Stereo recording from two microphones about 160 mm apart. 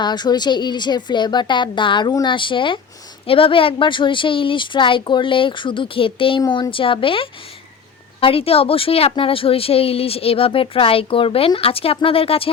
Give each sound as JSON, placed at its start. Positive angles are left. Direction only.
{"t": 0.0, "sound": "a woman's voice", "side_deg": 25}